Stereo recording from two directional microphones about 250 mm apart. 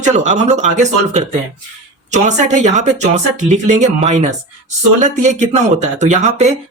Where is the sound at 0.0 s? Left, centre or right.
Right.